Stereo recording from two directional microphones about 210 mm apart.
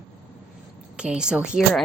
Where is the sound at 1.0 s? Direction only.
5° right (ahead or behind).